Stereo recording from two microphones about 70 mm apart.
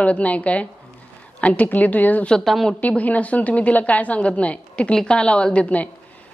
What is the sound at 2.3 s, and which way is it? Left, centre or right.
Speech, centre.